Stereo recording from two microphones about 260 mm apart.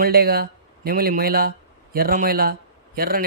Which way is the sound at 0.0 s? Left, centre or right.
Right.